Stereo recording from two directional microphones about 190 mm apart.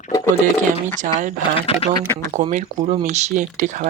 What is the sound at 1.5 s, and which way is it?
Speech, 30° left (ahead or behind).